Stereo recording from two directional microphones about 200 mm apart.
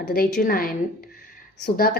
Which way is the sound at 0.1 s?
50° left (ahead or behind).